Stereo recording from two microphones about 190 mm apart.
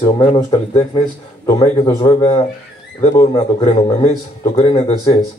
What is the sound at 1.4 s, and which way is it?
Speech, 20° left (ahead or behind).